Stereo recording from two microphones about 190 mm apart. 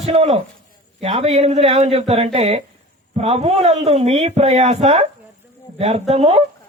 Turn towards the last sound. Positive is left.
turn(degrees=-35)  # may be behind; listen again after turning